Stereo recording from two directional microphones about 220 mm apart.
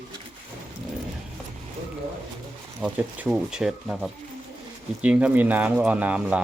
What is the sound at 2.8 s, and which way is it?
Speech, 5° right (ahead or behind).